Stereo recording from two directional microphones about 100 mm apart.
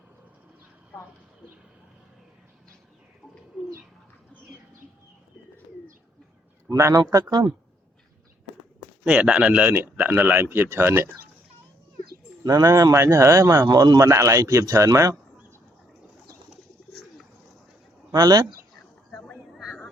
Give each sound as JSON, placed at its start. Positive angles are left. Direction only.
{"t": 6.7, "sound": "speech", "side_deg": -35}
{"t": 9.0, "sound": "speech", "side_deg": -10}
{"t": 12.4, "sound": "speech", "side_deg": -35}
{"t": 18.1, "sound": "speech", "side_deg": -40}
{"t": 19.1, "sound": "a sound", "side_deg": 0}